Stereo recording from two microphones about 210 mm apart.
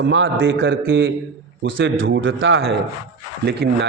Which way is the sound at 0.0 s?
60° right (ahead or behind).